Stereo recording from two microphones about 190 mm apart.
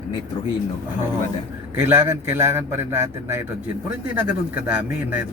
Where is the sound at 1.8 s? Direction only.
10° right (ahead or behind).